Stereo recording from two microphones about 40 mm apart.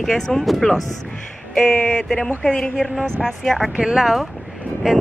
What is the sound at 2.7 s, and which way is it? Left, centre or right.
Speech, centre.